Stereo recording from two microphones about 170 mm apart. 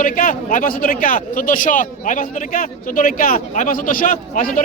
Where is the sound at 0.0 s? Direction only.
50° left (ahead or behind).